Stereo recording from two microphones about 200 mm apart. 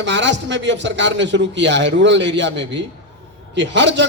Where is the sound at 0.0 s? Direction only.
65° right (ahead or behind).